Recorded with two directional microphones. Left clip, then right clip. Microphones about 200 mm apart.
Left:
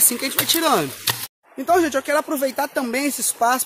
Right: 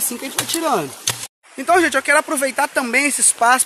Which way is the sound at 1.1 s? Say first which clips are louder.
Even; centre (ahead or behind).